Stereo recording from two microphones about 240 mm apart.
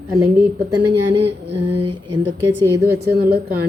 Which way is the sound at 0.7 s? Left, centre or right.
Right.